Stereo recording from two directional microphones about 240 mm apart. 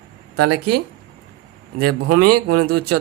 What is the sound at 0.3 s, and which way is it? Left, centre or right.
Speech, right.